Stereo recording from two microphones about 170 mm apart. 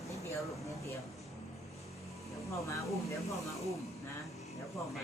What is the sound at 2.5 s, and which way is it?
Speech, 20° left (ahead or behind).